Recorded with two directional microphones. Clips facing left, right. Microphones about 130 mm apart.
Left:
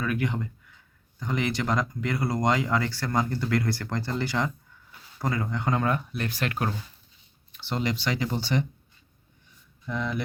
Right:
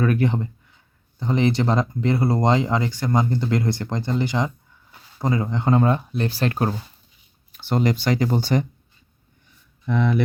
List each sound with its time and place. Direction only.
0.0 s speech: 40° right (ahead or behind)
7.5 s speech: 45° right (ahead or behind)
9.8 s speech: 65° right (ahead or behind)